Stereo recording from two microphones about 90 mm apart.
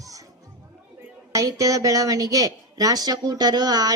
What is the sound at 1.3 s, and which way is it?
A woman's voice, 35° right (ahead or behind).